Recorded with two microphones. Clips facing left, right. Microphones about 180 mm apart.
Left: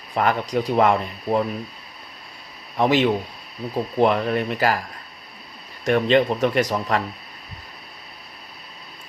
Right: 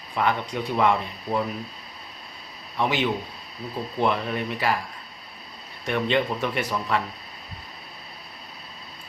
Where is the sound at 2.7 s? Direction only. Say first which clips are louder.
Left 6 dB; 35° left (ahead or behind).